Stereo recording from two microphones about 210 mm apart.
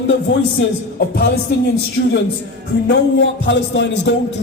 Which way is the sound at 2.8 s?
60° left (ahead or behind).